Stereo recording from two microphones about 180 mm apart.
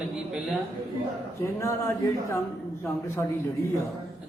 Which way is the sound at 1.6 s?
15° left (ahead or behind).